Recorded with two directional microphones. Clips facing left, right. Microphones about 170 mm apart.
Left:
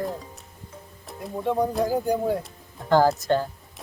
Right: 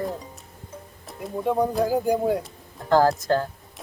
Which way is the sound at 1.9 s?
10° right (ahead or behind).